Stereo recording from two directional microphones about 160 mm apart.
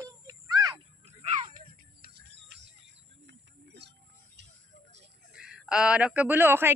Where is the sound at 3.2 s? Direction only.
90° right.